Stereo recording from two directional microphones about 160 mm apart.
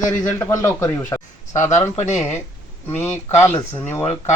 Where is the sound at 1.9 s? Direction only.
45° left (ahead or behind).